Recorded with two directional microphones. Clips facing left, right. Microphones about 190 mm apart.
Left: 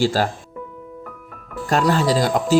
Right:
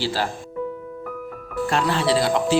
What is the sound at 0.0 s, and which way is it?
Speech, 45° left (ahead or behind).